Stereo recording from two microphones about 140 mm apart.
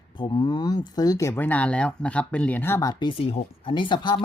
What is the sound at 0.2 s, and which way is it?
Speech, 30° left (ahead or behind).